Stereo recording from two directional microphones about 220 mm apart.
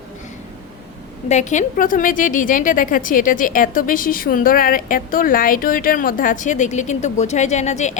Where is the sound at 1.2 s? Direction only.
30° left (ahead or behind).